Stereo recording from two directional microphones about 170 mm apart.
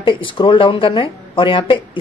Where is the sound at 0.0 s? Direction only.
30° left (ahead or behind).